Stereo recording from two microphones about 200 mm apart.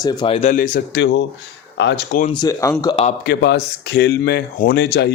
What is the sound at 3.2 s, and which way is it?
Speech, 55° left (ahead or behind).